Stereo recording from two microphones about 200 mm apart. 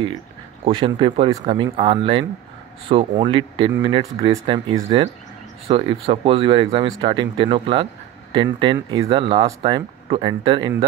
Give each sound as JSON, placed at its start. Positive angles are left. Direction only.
{"t": 0.7, "sound": "speech", "side_deg": -25}